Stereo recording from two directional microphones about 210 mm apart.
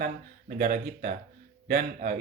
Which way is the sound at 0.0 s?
40° right (ahead or behind).